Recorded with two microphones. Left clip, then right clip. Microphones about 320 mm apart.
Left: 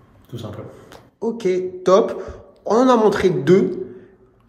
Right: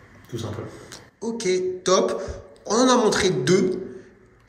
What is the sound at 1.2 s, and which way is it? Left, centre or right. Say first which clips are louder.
A man's voice: left 3 dB; centre.